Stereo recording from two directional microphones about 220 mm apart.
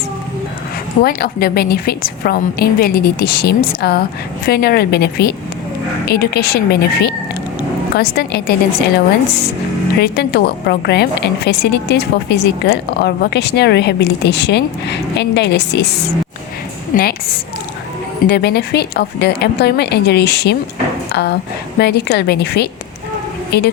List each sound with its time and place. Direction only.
1.0 s a woman's voice: 45° left (ahead or behind)
10.0 s a woman's voice: 45° left (ahead or behind)
16.9 s a woman's voice: 45° left (ahead or behind)
18.3 s a woman's voice: 45° left (ahead or behind)